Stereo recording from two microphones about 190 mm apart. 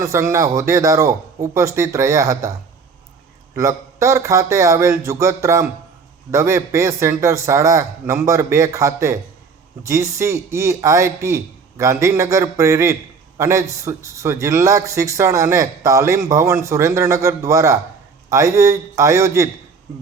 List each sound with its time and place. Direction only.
0.0 s a man's voice: 15° right (ahead or behind)